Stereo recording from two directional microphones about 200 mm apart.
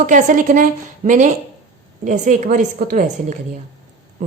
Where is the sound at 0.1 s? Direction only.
40° right (ahead or behind).